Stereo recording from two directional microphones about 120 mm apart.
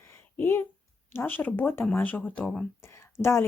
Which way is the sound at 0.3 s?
20° left (ahead or behind).